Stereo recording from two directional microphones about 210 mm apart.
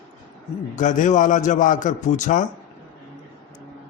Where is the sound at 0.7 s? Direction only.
35° left (ahead or behind).